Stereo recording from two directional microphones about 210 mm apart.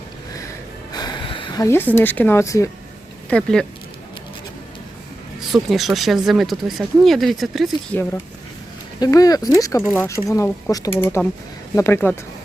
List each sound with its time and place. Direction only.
0.9 s speech: 20° left (ahead or behind); by 3.7 s 5° left (ahead or behind)
5.5 s speech: centre (ahead or behind)
9.0 s speech: 15° left (ahead or behind)